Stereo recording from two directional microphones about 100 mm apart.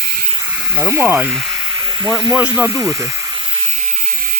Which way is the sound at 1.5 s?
40° right (ahead or behind).